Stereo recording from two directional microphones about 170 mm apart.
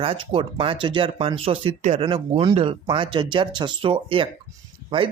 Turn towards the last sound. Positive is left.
turn(degrees=-30)  # may be behind; listen again after turning